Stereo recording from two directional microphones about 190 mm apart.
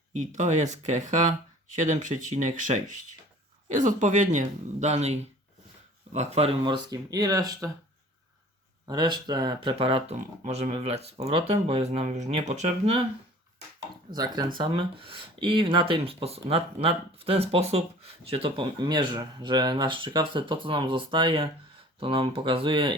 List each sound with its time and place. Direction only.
0.1 s speech: 40° right (ahead or behind); by 7.7 s 20° right (ahead or behind)
8.9 s speech: 20° right (ahead or behind)
14.1 s speech: 20° right (ahead or behind)